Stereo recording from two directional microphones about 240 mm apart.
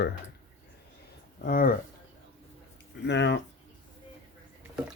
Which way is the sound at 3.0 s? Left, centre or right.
Left.